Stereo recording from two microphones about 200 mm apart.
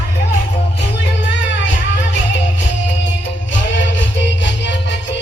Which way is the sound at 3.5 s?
65° left (ahead or behind).